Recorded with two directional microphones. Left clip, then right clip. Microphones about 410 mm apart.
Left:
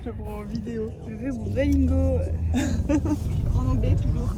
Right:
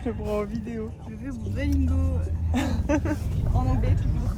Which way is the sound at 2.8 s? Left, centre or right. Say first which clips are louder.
Left 1 dB; right.